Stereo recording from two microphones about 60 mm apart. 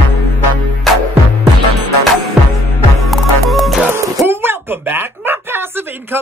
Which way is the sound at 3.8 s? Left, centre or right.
Right.